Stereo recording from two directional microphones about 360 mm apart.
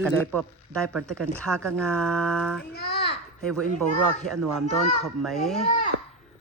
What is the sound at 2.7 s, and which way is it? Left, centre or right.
Babbling, left.